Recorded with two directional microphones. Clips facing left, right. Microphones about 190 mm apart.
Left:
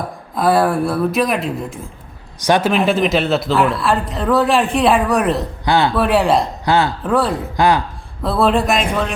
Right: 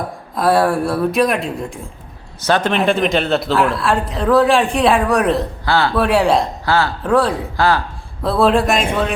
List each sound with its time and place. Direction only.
0.3 s speech: centre (ahead or behind)
5.6 s speech: 20° left (ahead or behind)
5.9 s speech: centre (ahead or behind)
6.7 s speech: 20° left (ahead or behind)
7.0 s speech: centre (ahead or behind)
7.5 s speech: 15° left (ahead or behind)
8.2 s speech: centre (ahead or behind)